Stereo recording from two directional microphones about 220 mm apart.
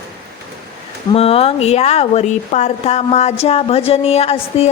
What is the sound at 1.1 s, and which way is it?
Speech, 25° left (ahead or behind).